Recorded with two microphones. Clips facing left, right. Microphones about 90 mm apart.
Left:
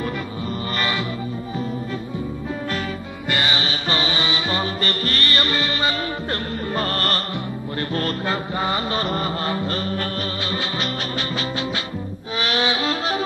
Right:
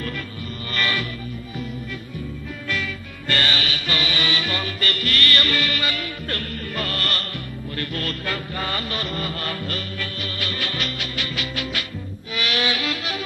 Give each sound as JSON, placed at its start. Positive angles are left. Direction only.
{"t": 0.7, "sound": "music", "side_deg": 20}
{"t": 3.3, "sound": "music", "side_deg": 20}
{"t": 9.0, "sound": "music", "side_deg": 35}